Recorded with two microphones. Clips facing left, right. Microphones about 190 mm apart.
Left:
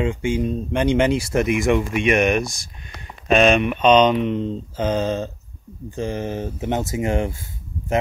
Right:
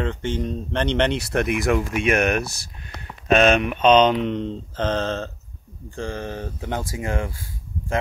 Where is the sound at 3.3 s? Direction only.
Centre (ahead or behind); by 8.0 s 25° left (ahead or behind).